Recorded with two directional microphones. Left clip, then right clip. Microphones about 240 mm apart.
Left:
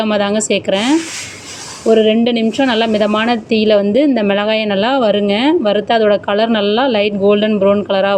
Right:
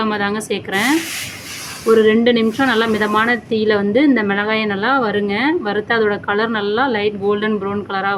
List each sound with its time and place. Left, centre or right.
0.0 s a woman's voice: centre